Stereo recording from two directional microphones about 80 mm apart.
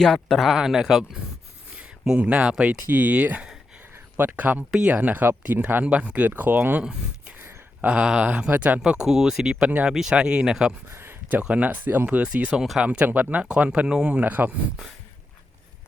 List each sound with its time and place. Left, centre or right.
0.0 s speech: centre
1.7 s speech: centre
5.1 s speech: right
7.3 s a sound: right
7.9 s speech: centre
8.8 s speech: centre
10.8 s a sound: right
11.4 s speech: centre